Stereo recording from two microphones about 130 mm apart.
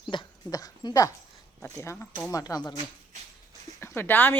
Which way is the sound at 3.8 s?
15° left (ahead or behind).